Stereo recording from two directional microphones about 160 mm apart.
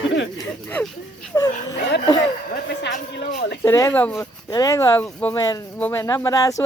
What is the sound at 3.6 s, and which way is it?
Speech, 15° left (ahead or behind).